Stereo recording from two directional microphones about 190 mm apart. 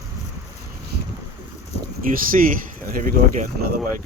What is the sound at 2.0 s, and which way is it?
Speech, 45° right (ahead or behind).